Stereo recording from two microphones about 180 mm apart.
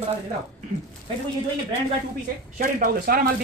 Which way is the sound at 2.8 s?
55° right (ahead or behind).